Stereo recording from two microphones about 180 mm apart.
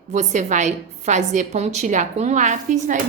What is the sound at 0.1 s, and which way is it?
A woman's voice, 40° right (ahead or behind).